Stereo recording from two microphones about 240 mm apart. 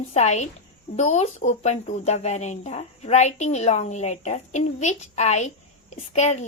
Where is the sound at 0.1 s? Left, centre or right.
Left.